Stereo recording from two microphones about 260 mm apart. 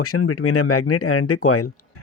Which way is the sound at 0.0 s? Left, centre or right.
Left.